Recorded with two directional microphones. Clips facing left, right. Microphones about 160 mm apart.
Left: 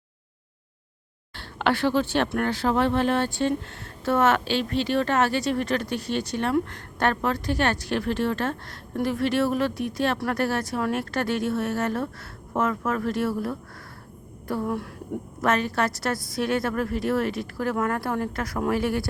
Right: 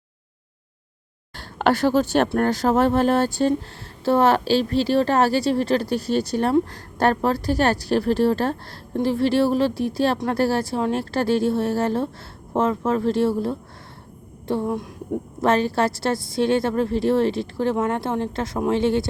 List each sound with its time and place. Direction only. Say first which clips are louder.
1.4 s a woman's voice: right 4 dB; 40° right (ahead or behind); by 19.0 s 25° right (ahead or behind)